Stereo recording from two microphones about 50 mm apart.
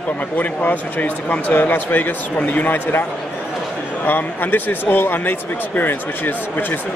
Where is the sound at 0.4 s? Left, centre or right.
Left.